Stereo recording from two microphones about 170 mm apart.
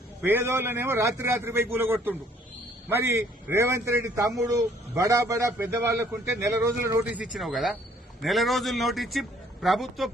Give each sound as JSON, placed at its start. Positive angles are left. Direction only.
{"t": 0.2, "sound": "a man's voice", "side_deg": -10}
{"t": 7.0, "sound": "a man's voice", "side_deg": -5}